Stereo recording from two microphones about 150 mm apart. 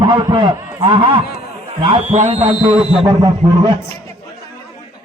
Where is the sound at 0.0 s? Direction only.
30° right (ahead or behind).